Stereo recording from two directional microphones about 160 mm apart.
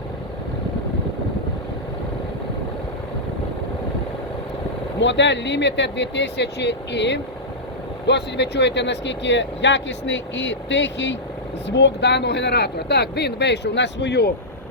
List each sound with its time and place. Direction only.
5.0 s speech: 90° left